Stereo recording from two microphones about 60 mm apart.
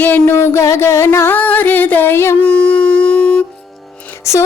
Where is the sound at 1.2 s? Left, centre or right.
Left.